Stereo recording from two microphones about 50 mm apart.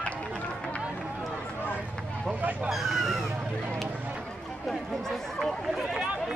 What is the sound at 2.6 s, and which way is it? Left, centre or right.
Speech, centre.